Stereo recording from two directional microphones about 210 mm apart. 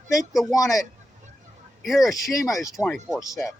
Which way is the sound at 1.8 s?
Centre (ahead or behind).